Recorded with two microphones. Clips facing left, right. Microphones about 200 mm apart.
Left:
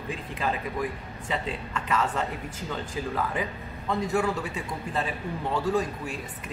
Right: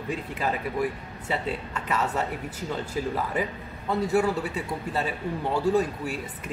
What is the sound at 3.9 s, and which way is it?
Speech, 5° right (ahead or behind).